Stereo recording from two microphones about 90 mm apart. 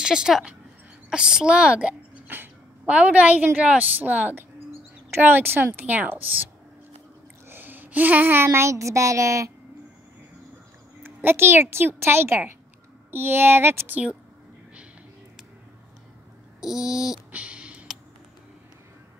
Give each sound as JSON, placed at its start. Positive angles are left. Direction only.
{"t": 0.0, "sound": "a child's voice", "side_deg": -10}
{"t": 11.0, "sound": "a woman's voice", "side_deg": -20}
{"t": 16.6, "sound": "babbling", "side_deg": -5}
{"t": 17.3, "sound": "a sound", "side_deg": -15}